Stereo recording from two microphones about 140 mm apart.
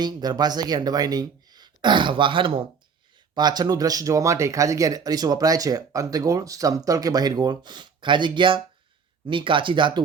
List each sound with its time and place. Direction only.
0.0 s speech: 30° right (ahead or behind)